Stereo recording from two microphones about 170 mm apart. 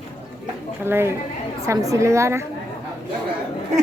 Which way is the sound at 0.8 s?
15° right (ahead or behind).